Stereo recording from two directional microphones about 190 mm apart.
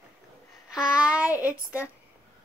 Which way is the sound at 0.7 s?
5° right (ahead or behind).